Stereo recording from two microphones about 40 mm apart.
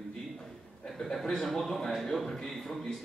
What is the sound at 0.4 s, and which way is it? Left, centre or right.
Chuckle, centre.